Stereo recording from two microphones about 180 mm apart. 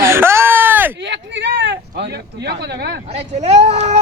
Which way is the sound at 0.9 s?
75° right (ahead or behind).